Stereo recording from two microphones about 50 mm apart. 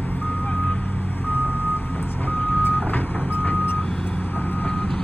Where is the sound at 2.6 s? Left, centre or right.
Left.